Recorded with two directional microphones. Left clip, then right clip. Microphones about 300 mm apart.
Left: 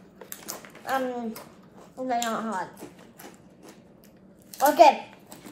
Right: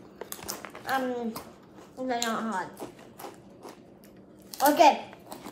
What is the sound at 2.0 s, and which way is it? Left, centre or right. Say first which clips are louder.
Speech: left 2 dB; centre.